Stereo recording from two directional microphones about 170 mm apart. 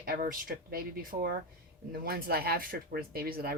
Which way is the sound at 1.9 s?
60° right (ahead or behind).